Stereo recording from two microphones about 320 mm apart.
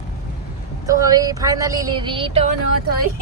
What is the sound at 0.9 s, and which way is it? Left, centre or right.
Speech, centre.